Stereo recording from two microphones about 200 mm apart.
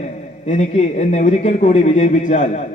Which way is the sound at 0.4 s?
35° left (ahead or behind).